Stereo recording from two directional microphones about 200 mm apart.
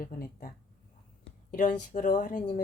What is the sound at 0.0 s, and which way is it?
Speech, 45° left (ahead or behind).